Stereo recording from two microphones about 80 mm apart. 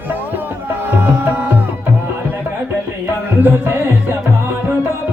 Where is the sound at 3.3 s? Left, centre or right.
Right.